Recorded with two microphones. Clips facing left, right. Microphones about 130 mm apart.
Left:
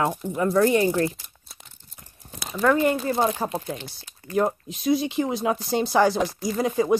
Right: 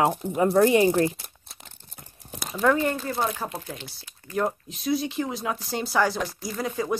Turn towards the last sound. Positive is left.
turn(degrees=20)  # may be behind; listen again after turning